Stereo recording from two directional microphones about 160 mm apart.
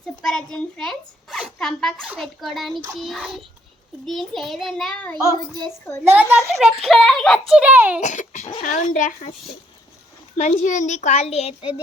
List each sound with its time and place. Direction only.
0.2 s a child's voice: 5° left (ahead or behind)
6.1 s a child's voice: 15° right (ahead or behind)
6.5 s a child's voice: centre (ahead or behind)
8.0 s a child's voice: 50° left (ahead or behind)
10.3 s a child's voice: 50° left (ahead or behind)